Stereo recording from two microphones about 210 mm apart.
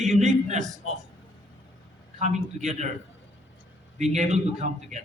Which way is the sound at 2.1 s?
35° right (ahead or behind).